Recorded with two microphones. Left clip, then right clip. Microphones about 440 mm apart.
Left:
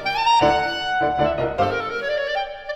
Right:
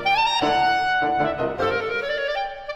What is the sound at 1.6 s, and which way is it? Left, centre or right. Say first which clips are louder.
Music: even; left.